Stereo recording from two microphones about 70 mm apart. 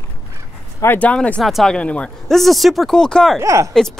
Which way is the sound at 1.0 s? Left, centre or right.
Centre.